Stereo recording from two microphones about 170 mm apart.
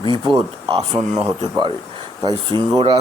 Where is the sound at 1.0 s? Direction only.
25° right (ahead or behind).